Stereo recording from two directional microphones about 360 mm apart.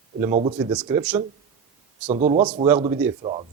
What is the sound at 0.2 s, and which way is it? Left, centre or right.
Speech, centre.